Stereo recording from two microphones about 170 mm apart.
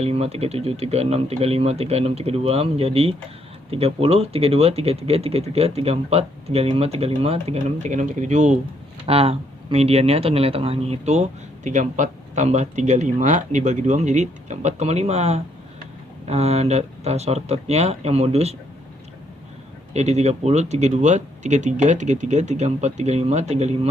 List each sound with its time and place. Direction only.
0.0 s a man's voice: 35° right (ahead or behind)
9.0 s a man's voice: 35° right (ahead or behind)
19.9 s a man's voice: 40° right (ahead or behind)